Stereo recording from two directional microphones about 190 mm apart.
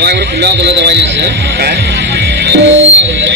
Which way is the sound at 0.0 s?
60° right (ahead or behind).